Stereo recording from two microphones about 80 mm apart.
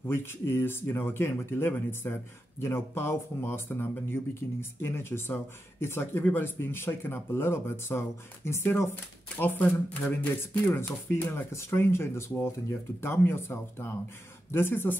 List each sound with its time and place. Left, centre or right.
0.1 s speech: left
9.4 s speech: left